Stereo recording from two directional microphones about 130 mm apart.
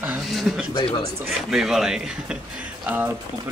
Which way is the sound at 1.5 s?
5° right (ahead or behind).